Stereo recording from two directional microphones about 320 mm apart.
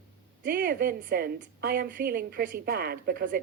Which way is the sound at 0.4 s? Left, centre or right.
Right.